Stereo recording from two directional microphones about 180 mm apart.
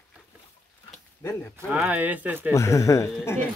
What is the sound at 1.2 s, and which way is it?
Speech, 15° left (ahead or behind).